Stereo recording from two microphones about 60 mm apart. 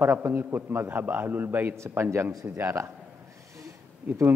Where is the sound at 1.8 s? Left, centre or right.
Right.